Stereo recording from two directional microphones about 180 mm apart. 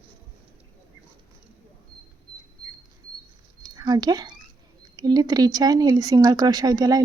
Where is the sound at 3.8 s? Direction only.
20° right (ahead or behind).